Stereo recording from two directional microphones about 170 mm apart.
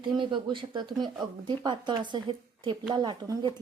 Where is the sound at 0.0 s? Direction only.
30° right (ahead or behind).